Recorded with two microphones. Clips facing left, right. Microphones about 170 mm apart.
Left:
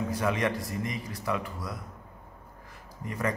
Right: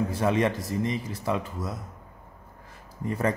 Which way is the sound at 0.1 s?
25° right (ahead or behind).